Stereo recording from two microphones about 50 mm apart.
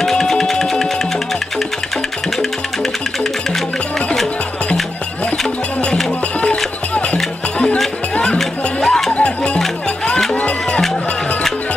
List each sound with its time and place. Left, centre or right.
0.0 s music: centre
6.4 s music: left
9.1 s music: left